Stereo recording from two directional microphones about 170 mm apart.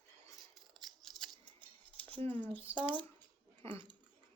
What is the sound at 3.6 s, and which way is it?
Dog, 10° left (ahead or behind).